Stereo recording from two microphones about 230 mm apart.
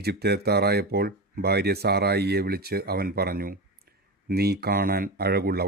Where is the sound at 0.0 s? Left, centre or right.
Right.